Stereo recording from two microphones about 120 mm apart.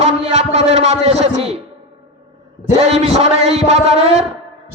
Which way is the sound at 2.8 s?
60° right (ahead or behind).